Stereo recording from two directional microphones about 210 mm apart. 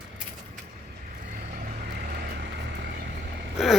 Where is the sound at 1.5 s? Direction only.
45° right (ahead or behind).